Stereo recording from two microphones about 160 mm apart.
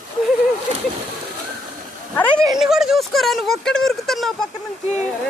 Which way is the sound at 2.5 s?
Centre (ahead or behind).